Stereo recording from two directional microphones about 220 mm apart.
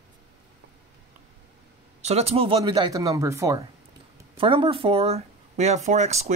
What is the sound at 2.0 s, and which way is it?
Speech, 30° right (ahead or behind).